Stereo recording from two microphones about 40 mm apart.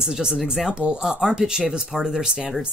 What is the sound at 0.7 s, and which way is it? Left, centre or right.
Speech, right.